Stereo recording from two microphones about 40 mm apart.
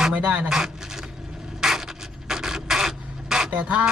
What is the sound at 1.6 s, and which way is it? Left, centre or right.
Filing, centre.